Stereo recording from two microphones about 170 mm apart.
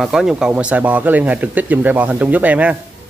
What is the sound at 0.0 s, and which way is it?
Speech, 5° right (ahead or behind).